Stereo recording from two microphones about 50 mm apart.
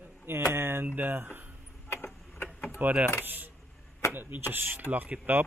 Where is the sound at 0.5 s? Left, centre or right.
Right.